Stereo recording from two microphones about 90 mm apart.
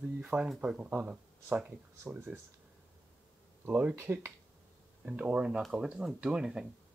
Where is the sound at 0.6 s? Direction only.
15° right (ahead or behind).